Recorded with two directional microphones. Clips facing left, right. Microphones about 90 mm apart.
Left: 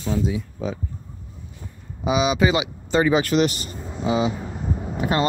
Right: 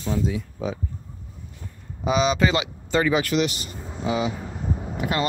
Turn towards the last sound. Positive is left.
turn(degrees=30)  # may be behind; listen again after turning